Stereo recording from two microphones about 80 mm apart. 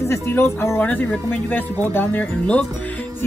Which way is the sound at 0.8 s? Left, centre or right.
Centre.